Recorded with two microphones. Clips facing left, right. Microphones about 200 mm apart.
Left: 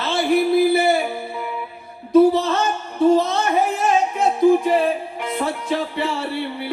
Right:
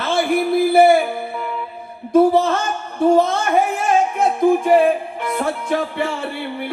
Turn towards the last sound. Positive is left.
turn(degrees=-50)  # may be behind; listen again after turning